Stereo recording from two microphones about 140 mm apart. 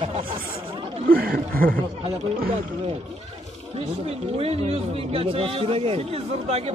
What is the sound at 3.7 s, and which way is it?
A man's voice, 45° right (ahead or behind).